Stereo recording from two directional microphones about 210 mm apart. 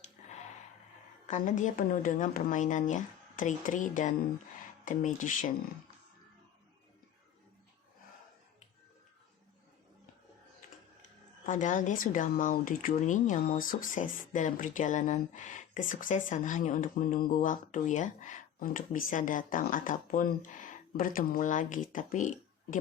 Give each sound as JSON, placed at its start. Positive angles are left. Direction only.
{"t": 0.2, "sound": "a sound", "side_deg": 35}
{"t": 1.3, "sound": "speech", "side_deg": 35}
{"t": 11.4, "sound": "speech", "side_deg": 35}